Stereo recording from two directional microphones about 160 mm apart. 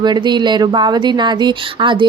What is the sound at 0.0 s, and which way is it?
Speech, 25° right (ahead or behind).